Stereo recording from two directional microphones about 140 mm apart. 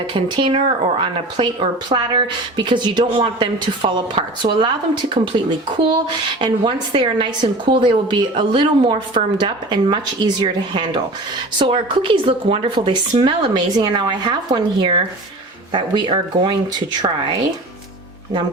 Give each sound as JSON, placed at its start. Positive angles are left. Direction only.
{"t": 0.1, "sound": "a woman's voice", "side_deg": -35}
{"t": 11.6, "sound": "a woman's voice", "side_deg": -35}